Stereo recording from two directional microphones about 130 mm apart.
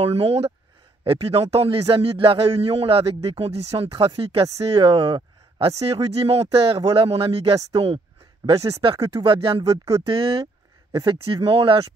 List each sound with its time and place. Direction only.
0.0 s a man's voice: 50° right (ahead or behind)